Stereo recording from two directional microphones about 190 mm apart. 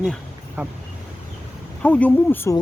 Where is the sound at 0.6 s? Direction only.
10° right (ahead or behind).